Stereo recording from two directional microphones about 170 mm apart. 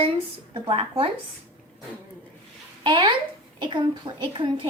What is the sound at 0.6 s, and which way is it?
Speech, 35° right (ahead or behind).